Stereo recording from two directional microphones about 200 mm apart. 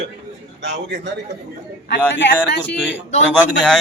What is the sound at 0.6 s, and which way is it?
Speech, 60° right (ahead or behind).